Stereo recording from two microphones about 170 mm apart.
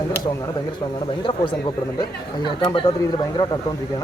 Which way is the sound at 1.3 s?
25° left (ahead or behind).